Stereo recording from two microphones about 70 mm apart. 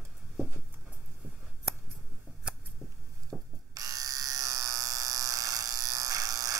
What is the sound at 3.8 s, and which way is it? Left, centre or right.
Electric shaver, right.